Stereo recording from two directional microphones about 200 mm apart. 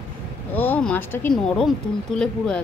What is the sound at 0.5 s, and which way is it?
Speech, 10° left (ahead or behind).